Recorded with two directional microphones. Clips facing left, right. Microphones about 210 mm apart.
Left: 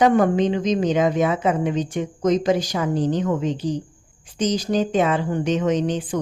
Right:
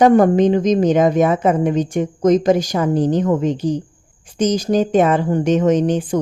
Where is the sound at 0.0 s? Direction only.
45° right (ahead or behind).